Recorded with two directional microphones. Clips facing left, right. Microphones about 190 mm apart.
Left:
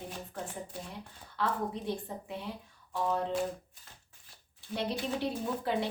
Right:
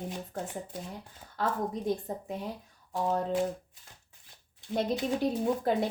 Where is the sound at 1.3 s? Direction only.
45° right (ahead or behind).